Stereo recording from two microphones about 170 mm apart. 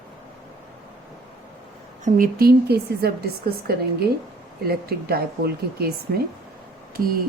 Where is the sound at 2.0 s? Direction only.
60° right (ahead or behind).